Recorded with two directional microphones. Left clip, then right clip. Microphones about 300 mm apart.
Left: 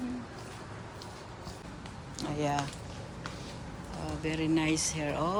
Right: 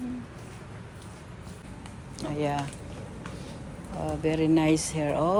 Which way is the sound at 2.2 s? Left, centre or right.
Centre.